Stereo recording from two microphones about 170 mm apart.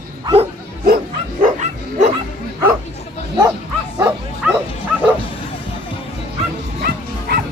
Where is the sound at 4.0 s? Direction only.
15° right (ahead or behind).